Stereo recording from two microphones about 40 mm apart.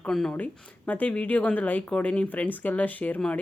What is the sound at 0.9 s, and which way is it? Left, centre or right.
Speech, left.